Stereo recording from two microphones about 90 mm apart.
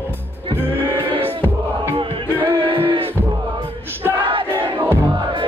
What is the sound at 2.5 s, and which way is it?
Music, 75° right (ahead or behind).